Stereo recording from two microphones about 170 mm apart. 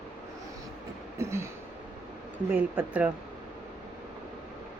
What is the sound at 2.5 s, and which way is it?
Speech, 10° right (ahead or behind).